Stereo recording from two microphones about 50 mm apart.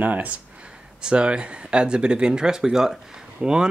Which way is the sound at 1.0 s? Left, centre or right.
Centre.